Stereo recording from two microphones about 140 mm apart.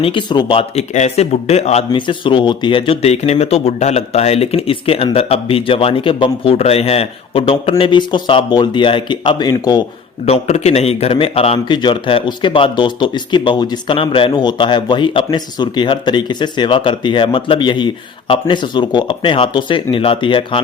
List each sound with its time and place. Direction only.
0.0 s speech: 35° left (ahead or behind)
0.8 s speech: 55° left (ahead or behind)
1.9 s speech: 35° left (ahead or behind)
10.2 s speech: 50° left (ahead or behind)